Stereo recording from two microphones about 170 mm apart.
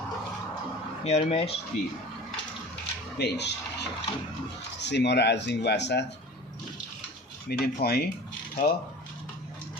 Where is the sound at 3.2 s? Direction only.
90° left.